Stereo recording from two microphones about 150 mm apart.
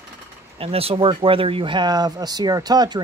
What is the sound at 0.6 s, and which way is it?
A man's voice, 40° right (ahead or behind).